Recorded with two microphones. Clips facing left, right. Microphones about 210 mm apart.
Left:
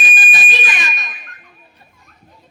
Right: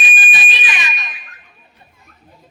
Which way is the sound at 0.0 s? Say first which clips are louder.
Even; 45° left (ahead or behind).